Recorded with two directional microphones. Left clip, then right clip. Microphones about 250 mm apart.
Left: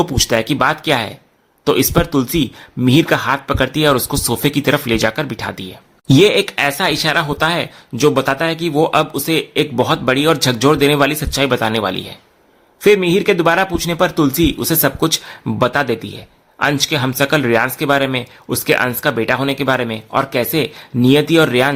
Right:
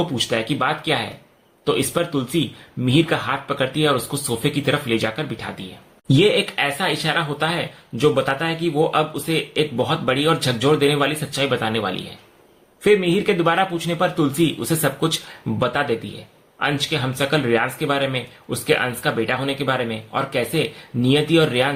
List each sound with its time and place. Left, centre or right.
0.3 s speech: left